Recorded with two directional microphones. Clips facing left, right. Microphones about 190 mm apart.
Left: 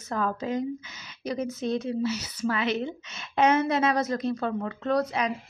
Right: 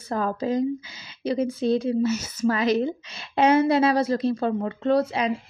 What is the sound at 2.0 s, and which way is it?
A woman's voice, 45° right (ahead or behind).